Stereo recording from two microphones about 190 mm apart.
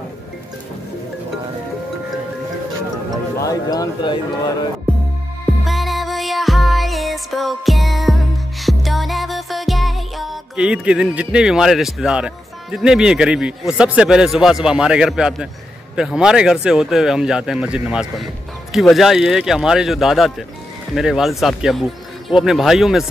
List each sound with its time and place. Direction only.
3.3 s speech: 20° left (ahead or behind)
5.7 s music: centre (ahead or behind)
12.7 s a man's voice: 5° right (ahead or behind)